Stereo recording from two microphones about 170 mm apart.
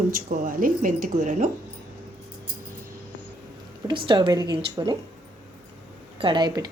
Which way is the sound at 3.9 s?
25° right (ahead or behind).